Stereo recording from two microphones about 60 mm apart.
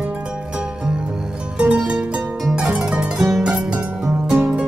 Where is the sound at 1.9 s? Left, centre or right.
Centre.